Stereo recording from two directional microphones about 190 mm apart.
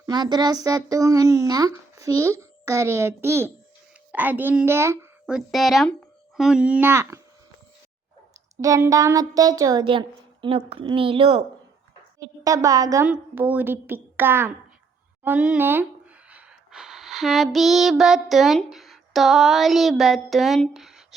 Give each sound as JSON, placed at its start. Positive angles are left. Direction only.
{"t": 0.0, "sound": "a woman's voice", "side_deg": -20}
{"t": 5.3, "sound": "speech", "side_deg": 0}
{"t": 8.6, "sound": "a woman's voice", "side_deg": -15}
{"t": 16.3, "sound": "a sound", "side_deg": 0}